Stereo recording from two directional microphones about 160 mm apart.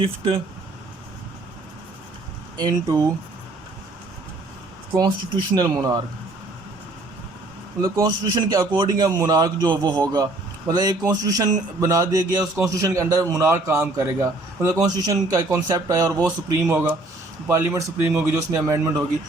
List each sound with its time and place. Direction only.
0.0 s speech: 35° right (ahead or behind)
2.6 s a man's voice: 25° right (ahead or behind)
5.5 s a man's voice: 25° right (ahead or behind)
7.8 s a man's voice: 20° right (ahead or behind)